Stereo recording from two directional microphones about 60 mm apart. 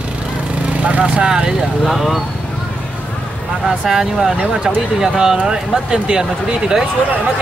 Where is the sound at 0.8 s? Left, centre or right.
Right.